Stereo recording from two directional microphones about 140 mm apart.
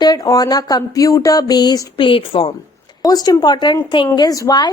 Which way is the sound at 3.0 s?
25° left (ahead or behind).